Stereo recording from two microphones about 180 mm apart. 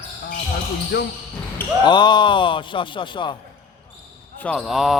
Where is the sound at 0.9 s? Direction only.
75° left (ahead or behind).